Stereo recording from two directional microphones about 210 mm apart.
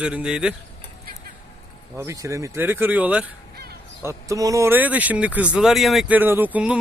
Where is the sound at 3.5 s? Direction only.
50° right (ahead or behind).